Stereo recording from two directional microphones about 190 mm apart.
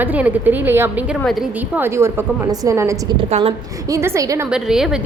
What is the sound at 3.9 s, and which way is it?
Speech, 15° right (ahead or behind).